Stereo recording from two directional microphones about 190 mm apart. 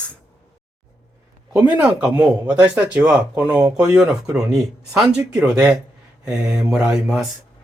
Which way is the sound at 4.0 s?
5° right (ahead or behind).